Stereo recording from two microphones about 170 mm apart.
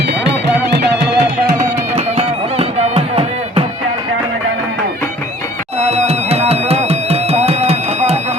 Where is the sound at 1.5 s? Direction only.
40° right (ahead or behind).